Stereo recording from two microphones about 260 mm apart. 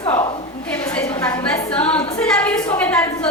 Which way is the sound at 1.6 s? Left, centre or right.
Centre.